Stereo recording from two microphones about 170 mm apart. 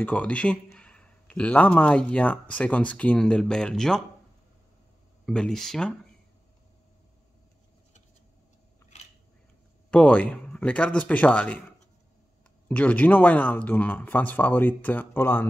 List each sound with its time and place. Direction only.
0.0 s a man's voice: 10° left (ahead or behind)
5.2 s speech: 5° left (ahead or behind)
8.9 s biting: 40° left (ahead or behind)
9.8 s a man's voice: 5° left (ahead or behind)
12.6 s a man's voice: 10° left (ahead or behind)